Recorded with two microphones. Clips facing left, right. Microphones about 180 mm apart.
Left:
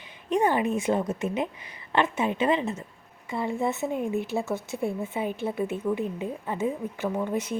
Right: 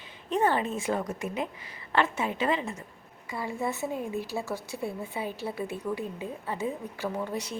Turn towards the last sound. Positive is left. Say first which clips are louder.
# left 4 dB
turn(degrees=20)  # may be behind; listen again after turning